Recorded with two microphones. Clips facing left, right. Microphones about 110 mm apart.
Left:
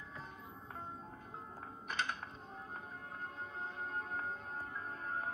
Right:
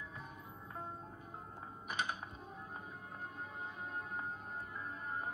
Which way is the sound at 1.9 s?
10° right (ahead or behind).